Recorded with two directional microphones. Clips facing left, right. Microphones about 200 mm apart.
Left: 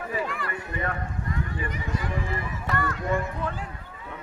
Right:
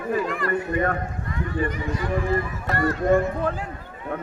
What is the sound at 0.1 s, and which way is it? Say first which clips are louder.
Speech: right 9 dB; 50° right (ahead or behind).